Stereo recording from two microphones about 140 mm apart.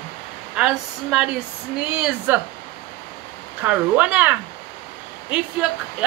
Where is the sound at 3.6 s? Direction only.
10° right (ahead or behind).